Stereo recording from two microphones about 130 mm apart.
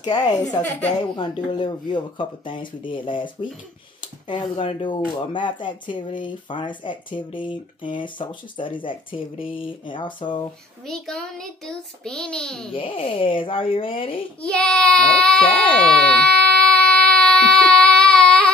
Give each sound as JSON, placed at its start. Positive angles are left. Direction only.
{"t": 0.0, "sound": "speech", "side_deg": 30}
{"t": 10.9, "sound": "a child's voice", "side_deg": 5}
{"t": 12.7, "sound": "speech", "side_deg": 40}
{"t": 14.4, "sound": "speech", "side_deg": 10}
{"t": 15.7, "sound": "a sound", "side_deg": 10}